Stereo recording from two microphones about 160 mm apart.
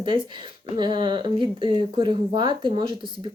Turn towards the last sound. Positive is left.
turn(degrees=-30)  # may be behind; listen again after turning